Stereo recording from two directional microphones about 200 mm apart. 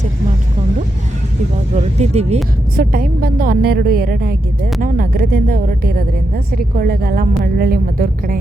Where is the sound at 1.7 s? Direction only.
35° right (ahead or behind).